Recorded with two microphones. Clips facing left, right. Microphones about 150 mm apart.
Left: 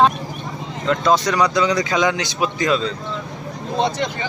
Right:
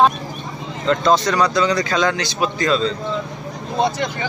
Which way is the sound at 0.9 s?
10° left (ahead or behind).